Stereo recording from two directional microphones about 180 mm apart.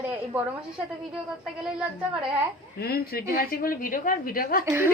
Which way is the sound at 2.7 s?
60° left (ahead or behind).